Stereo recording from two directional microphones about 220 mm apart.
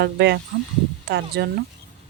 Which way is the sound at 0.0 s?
50° right (ahead or behind).